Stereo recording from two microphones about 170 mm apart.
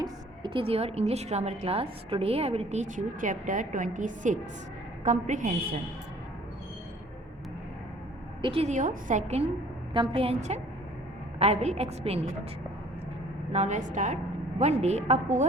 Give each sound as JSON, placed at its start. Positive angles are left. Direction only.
{"t": 0.0, "sound": "a woman's voice", "side_deg": -30}
{"t": 8.4, "sound": "a woman's voice", "side_deg": -30}
{"t": 9.9, "sound": "a woman's voice", "side_deg": -30}
{"t": 13.5, "sound": "a woman's voice", "side_deg": -45}